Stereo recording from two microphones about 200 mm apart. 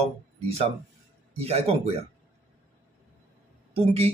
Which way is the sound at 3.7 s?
30° right (ahead or behind).